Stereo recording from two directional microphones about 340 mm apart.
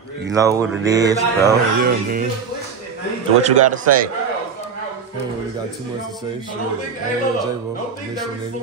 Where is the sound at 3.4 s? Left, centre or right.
Centre.